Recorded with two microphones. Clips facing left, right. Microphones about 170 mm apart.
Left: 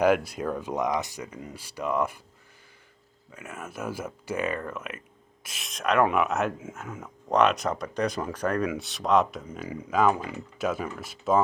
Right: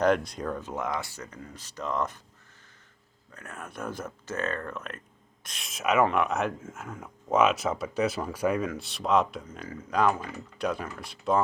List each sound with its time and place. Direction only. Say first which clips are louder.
0.0 s speech: left 2 dB; 5° left (ahead or behind)
3.3 s speech: left 2 dB; 5° left (ahead or behind)